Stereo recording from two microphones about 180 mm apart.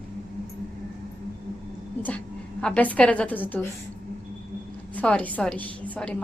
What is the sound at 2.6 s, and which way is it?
Speech, 5° left (ahead or behind).